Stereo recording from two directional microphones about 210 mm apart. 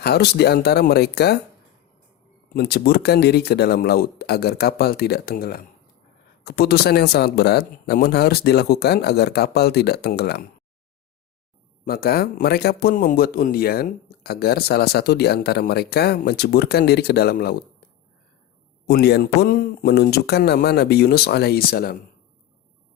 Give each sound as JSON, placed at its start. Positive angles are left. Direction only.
{"t": 0.0, "sound": "speech", "side_deg": 50}
{"t": 2.5, "sound": "speech", "side_deg": 50}
{"t": 11.9, "sound": "speech", "side_deg": 45}
{"t": 18.9, "sound": "speech", "side_deg": 50}